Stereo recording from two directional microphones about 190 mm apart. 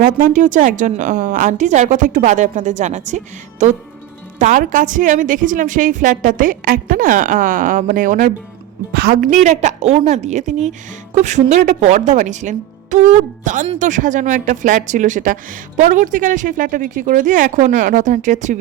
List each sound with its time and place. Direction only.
0.0 s a woman's voice: 45° right (ahead or behind)